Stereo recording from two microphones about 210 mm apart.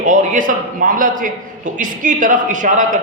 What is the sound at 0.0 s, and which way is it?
A man's voice, 35° right (ahead or behind).